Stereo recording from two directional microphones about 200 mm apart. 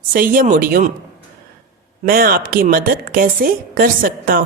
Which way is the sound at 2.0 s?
45° right (ahead or behind).